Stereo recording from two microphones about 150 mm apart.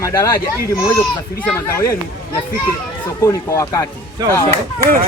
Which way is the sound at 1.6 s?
20° left (ahead or behind).